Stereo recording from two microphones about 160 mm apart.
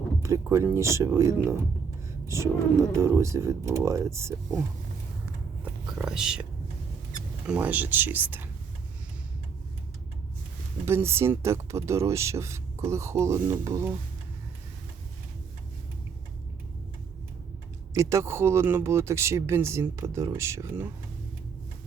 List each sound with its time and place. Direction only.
0.2 s speech: 20° right (ahead or behind)
5.6 s speech: 5° right (ahead or behind)
7.4 s speech: 5° right (ahead or behind)
10.8 s speech: 15° right (ahead or behind)
17.9 s speech: 20° right (ahead or behind)